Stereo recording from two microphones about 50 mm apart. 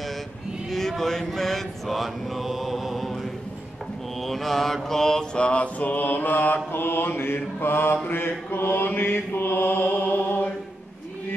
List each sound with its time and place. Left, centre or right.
0.7 s mantra: centre
4.2 s mantra: centre
5.4 s mantra: left